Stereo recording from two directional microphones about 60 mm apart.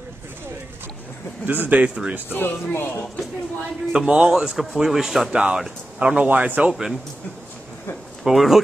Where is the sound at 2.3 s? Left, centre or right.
Left.